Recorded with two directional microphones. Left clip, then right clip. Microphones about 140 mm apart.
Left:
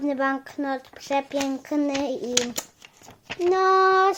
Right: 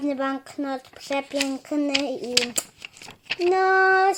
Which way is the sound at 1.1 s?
10° left (ahead or behind).